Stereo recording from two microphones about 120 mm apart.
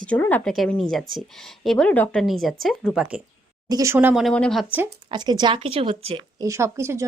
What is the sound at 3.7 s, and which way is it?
Speech, 30° right (ahead or behind).